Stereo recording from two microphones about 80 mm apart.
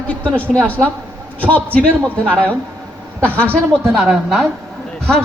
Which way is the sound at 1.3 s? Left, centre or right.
Centre.